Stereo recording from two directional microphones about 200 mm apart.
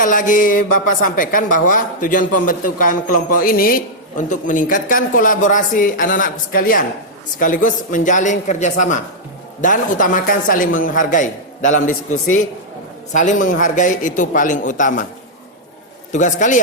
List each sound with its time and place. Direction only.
0.0 s a man's voice: 40° left (ahead or behind)
13.5 s a man's voice: 40° left (ahead or behind)
16.1 s a man's voice: 40° left (ahead or behind)